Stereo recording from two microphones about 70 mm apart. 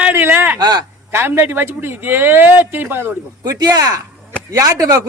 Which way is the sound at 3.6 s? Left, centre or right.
Right.